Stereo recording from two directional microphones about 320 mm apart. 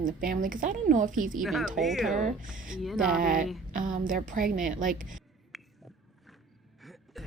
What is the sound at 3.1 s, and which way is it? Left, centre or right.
Speech, right.